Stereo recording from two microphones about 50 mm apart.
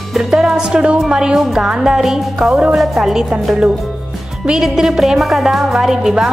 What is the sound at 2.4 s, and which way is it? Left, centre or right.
Music, right.